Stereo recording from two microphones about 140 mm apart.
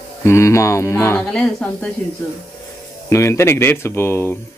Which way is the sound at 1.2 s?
5° left (ahead or behind).